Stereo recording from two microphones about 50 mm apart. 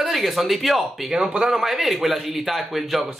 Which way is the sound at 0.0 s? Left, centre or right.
Centre.